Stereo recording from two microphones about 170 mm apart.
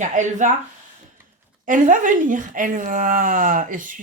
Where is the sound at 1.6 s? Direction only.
50° right (ahead or behind).